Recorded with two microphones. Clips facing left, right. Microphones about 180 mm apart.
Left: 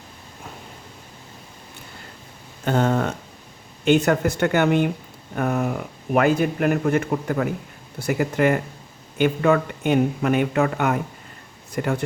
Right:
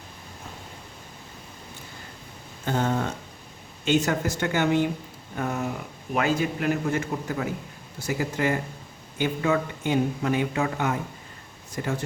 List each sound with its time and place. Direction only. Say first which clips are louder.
2.6 s speech: left 5 dB; 65° left (ahead or behind)